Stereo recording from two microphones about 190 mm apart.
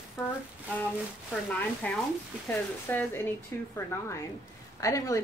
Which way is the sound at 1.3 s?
5° left (ahead or behind).